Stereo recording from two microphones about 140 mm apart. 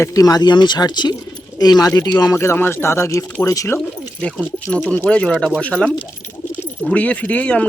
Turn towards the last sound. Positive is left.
turn(degrees=10)  # may be behind; listen again after turning